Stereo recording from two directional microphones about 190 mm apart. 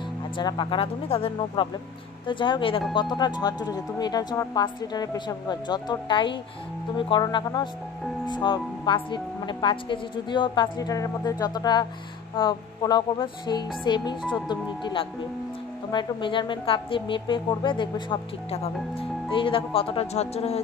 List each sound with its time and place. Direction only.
0.4 s a woman's voice: 25° left (ahead or behind)